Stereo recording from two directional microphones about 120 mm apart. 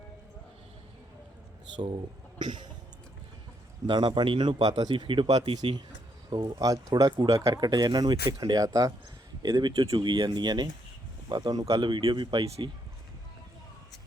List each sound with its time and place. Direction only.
1.7 s speech: 40° right (ahead or behind)
3.8 s a man's voice: 40° right (ahead or behind)